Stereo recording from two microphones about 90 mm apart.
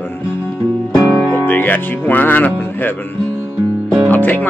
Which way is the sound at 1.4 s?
20° left (ahead or behind).